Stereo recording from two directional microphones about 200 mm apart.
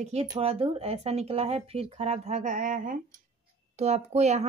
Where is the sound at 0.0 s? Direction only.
30° right (ahead or behind).